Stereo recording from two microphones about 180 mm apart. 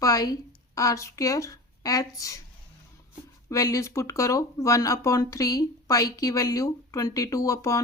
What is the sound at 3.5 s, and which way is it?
Speech, 20° left (ahead or behind).